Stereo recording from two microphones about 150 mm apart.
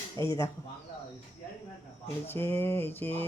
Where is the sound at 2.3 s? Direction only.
15° left (ahead or behind).